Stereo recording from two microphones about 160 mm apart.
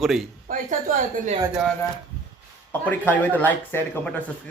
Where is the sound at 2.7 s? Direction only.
10° left (ahead or behind).